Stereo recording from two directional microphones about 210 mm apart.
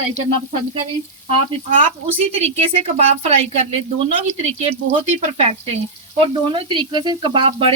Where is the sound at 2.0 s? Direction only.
30° right (ahead or behind).